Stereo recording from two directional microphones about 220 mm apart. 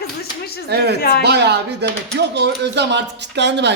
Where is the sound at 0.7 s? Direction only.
45° right (ahead or behind).